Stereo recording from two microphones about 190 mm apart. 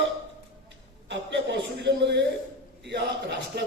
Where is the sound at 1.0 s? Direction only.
65° right (ahead or behind).